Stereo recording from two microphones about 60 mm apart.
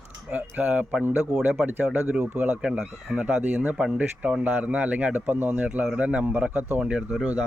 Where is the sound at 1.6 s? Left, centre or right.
Right.